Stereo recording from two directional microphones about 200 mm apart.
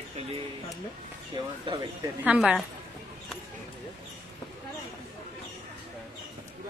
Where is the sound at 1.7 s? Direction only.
25° right (ahead or behind).